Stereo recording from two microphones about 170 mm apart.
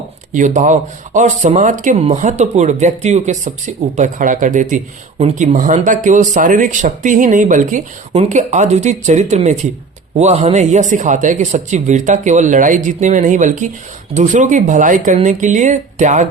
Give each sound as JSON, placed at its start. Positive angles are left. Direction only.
{"t": 0.3, "sound": "speech", "side_deg": -50}